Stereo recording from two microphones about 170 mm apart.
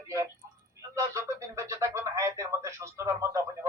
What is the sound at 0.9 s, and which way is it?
Radio, 15° right (ahead or behind).